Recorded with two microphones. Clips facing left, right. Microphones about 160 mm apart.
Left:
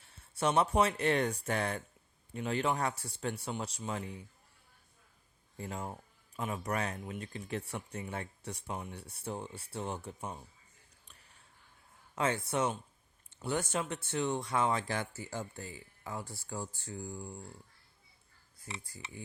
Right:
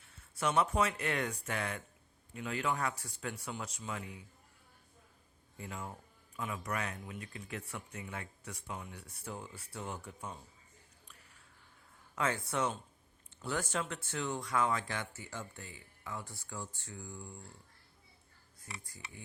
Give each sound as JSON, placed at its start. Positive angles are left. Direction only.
{"t": 0.0, "sound": "speech", "side_deg": 30}
{"t": 5.5, "sound": "speech", "side_deg": 35}
{"t": 12.1, "sound": "speech", "side_deg": 20}
{"t": 18.6, "sound": "speech", "side_deg": 25}